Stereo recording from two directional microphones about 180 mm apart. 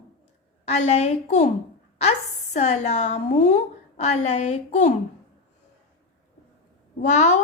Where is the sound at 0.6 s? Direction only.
35° left (ahead or behind).